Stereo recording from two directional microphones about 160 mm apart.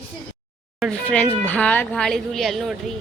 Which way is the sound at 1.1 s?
10° left (ahead or behind).